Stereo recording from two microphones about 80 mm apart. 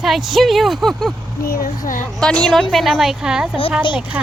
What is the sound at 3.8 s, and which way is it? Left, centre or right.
Speech, left.